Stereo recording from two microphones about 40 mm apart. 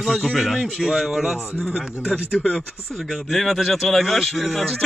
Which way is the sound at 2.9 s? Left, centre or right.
Centre.